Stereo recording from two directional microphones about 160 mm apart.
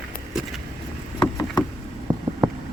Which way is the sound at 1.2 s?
25° left (ahead or behind).